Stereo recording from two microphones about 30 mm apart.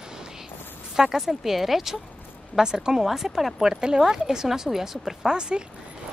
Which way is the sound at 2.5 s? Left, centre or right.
Right.